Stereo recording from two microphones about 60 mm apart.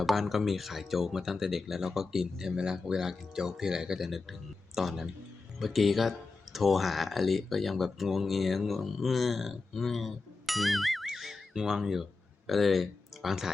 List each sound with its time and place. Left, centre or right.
0.0 s speech: centre